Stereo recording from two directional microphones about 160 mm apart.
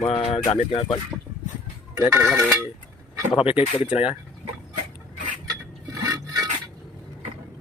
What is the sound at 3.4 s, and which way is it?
Speech, 40° left (ahead or behind).